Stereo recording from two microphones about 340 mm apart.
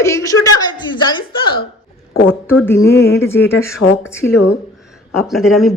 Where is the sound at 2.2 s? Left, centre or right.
Left.